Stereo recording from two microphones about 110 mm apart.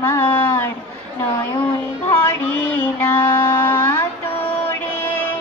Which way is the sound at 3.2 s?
20° left (ahead or behind).